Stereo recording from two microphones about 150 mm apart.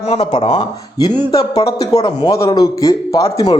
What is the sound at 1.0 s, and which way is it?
A man's voice, 25° left (ahead or behind).